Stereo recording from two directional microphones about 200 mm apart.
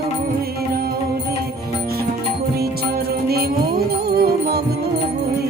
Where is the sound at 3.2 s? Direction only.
50° right (ahead or behind).